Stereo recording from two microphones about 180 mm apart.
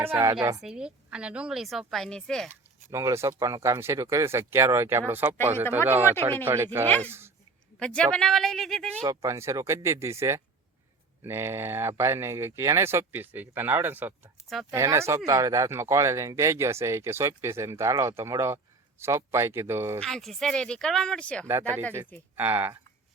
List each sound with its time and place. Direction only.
0.0 s a woman's voice: 15° right (ahead or behind)
0.6 s a woman's voice: 5° right (ahead or behind)
2.5 s speech: 15° right (ahead or behind)
6.8 s a woman's voice: 10° left (ahead or behind)
9.0 s speech: 15° right (ahead or behind)
20.0 s a woman's voice: 5° left (ahead or behind)
22.4 s speech: 10° right (ahead or behind)